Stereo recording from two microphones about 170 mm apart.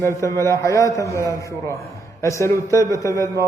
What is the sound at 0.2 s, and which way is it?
A man's voice, 15° left (ahead or behind).